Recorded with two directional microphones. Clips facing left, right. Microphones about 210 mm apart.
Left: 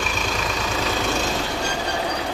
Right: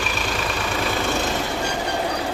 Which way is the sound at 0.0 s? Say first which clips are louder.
Even; 5° right (ahead or behind).